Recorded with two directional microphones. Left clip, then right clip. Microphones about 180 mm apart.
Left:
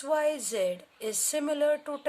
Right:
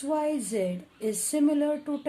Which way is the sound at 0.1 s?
35° left (ahead or behind).